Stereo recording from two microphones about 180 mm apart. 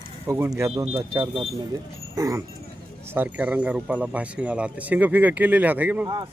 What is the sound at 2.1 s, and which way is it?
Speech, 15° right (ahead or behind).